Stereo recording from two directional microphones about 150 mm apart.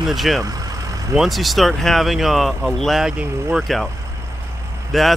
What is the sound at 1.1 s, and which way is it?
Speech, centre (ahead or behind).